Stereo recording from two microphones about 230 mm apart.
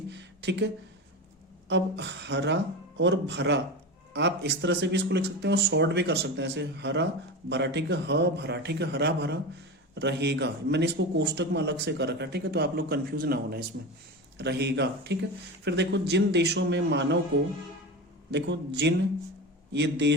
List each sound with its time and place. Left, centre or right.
0.1 s a sound: right
1.7 s a man's voice: right
18.3 s a man's voice: right